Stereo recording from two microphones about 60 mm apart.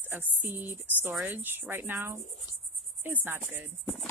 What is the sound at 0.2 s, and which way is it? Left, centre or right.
Cricket, right.